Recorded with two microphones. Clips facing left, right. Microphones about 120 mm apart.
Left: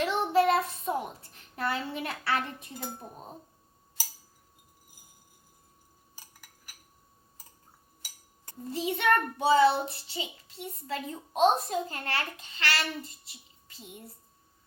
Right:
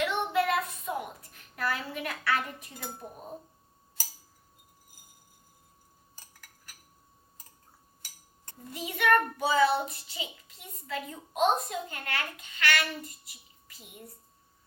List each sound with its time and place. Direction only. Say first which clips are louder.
0.0 s child singing: left 3 dB; 30° left (ahead or behind)
8.7 s a child's voice: even; 30° left (ahead or behind)